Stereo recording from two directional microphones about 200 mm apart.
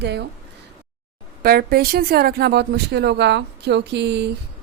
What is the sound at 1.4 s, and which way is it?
Speech, 50° right (ahead or behind).